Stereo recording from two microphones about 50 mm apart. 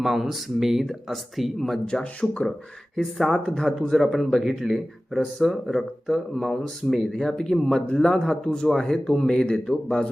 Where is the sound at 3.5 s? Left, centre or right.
Centre.